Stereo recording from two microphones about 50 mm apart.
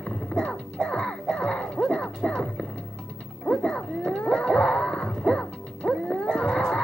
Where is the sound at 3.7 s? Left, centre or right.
Centre.